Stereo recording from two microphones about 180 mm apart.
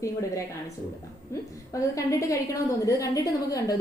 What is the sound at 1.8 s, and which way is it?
A woman's voice, 20° left (ahead or behind).